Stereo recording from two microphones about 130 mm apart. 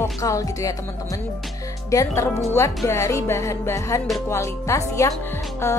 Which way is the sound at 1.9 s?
25° left (ahead or behind).